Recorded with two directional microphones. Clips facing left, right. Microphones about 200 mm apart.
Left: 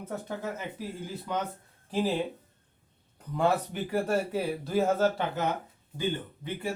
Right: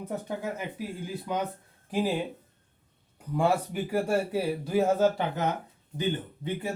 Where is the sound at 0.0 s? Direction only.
15° right (ahead or behind).